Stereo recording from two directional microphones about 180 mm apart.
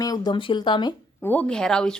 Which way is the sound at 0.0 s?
20° left (ahead or behind).